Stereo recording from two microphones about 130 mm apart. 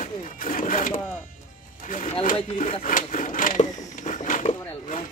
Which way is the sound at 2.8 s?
90° left.